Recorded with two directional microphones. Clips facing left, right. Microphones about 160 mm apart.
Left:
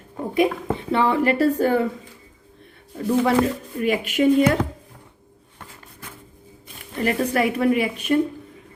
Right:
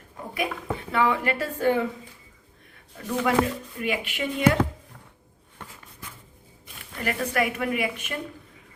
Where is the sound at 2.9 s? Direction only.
30° left (ahead or behind).